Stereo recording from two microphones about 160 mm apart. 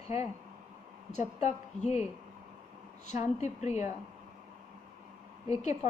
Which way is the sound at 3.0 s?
45° left (ahead or behind).